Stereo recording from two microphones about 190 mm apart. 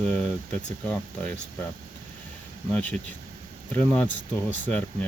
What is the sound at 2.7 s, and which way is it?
Speech, 5° left (ahead or behind).